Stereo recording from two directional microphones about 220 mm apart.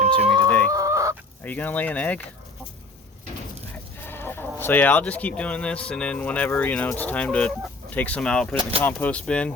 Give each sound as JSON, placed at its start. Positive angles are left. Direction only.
{"t": 0.0, "sound": "chicken", "side_deg": -30}
{"t": 0.7, "sound": "chicken", "side_deg": -15}
{"t": 1.5, "sound": "speech", "side_deg": 5}
{"t": 4.0, "sound": "chicken", "side_deg": 10}
{"t": 4.6, "sound": "speech", "side_deg": 10}